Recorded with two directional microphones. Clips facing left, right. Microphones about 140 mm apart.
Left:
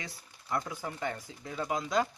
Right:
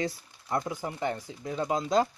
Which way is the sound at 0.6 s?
20° right (ahead or behind).